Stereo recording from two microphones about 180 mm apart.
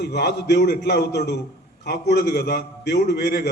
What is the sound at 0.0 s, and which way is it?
A man's voice, 65° left (ahead or behind).